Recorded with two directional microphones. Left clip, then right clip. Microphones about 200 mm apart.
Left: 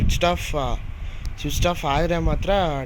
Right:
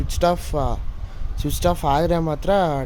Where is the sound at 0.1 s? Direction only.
15° right (ahead or behind).